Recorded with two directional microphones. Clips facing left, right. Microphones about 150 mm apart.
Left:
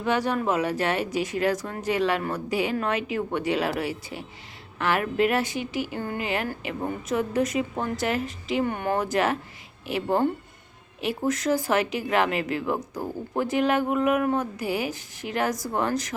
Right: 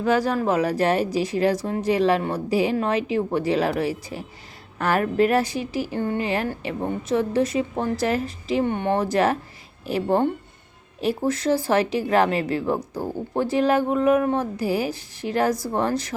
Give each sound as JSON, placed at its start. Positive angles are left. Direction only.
{"t": 0.0, "sound": "speech", "side_deg": -35}
{"t": 11.3, "sound": "speech", "side_deg": -30}